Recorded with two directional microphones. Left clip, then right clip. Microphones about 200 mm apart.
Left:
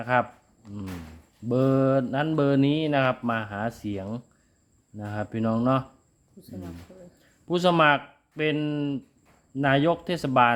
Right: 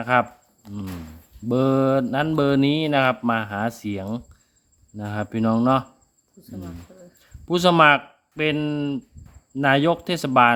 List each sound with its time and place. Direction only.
0.0 s speech: 10° right (ahead or behind)
0.6 s speech: 60° right (ahead or behind)
1.5 s speech: 15° right (ahead or behind)
7.2 s speech: 15° right (ahead or behind)